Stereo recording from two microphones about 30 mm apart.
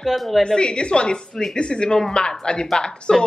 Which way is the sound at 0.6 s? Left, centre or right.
Left.